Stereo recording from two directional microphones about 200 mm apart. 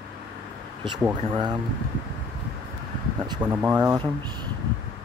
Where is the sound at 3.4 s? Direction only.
10° right (ahead or behind).